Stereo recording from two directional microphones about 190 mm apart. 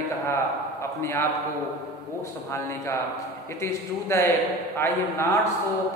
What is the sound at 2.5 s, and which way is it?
A man's voice, 15° left (ahead or behind).